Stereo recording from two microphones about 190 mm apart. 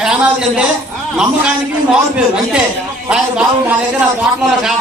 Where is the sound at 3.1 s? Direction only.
5° right (ahead or behind).